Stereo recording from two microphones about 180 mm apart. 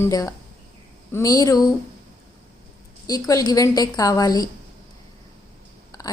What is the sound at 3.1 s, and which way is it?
Speech, 20° left (ahead or behind).